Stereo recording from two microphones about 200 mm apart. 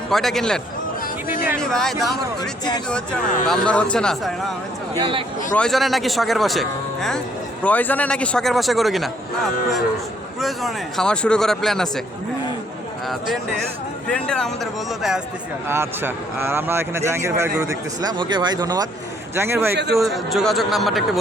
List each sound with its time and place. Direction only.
0.1 s speech: centre (ahead or behind)
2.4 s speech: 20° left (ahead or behind)
3.4 s speech: 5° left (ahead or behind)
4.9 s speech: 25° right (ahead or behind)
5.5 s speech: centre (ahead or behind)
10.4 s speech: centre (ahead or behind)
14.1 s speech: 5° left (ahead or behind)
15.7 s speech: 10° right (ahead or behind)
19.7 s a man's voice: 55° right (ahead or behind)
20.0 s speech: centre (ahead or behind)